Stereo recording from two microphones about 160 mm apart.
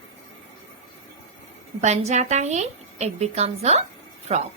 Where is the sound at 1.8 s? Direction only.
45° right (ahead or behind).